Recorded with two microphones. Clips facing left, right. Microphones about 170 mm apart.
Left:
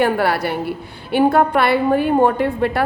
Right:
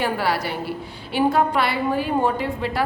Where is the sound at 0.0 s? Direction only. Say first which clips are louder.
Left 6 dB; 55° left (ahead or behind).